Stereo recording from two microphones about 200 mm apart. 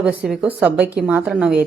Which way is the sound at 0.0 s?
5° right (ahead or behind).